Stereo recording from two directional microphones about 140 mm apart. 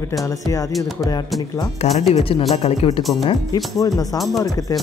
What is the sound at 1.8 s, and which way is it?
Speech, 50° left (ahead or behind).